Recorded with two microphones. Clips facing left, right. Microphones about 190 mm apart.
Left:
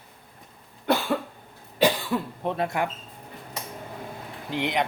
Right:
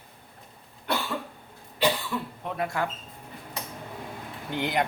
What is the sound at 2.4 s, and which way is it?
Speech, 25° left (ahead or behind).